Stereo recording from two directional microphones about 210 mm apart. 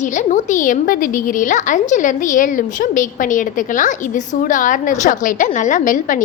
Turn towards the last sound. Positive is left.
turn(degrees=40)  # may be behind; listen again after turning